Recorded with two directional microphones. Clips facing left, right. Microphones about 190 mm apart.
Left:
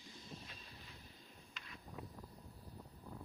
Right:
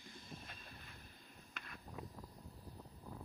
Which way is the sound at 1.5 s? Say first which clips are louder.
Right 3 dB; 55° right (ahead or behind).